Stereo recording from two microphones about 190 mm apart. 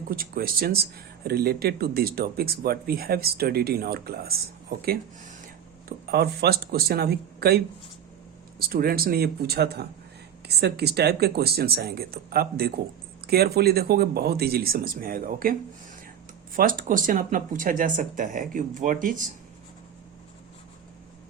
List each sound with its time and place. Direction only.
0.1 s speech: 50° right (ahead or behind)
16.6 s speech: 45° right (ahead or behind)